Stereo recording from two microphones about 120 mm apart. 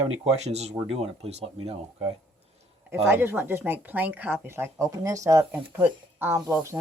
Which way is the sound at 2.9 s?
20° right (ahead or behind).